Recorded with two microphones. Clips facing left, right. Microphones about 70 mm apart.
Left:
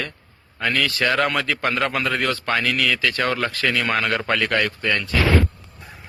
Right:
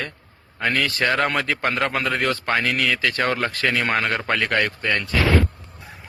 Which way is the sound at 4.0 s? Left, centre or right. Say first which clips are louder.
Left 1 dB; centre.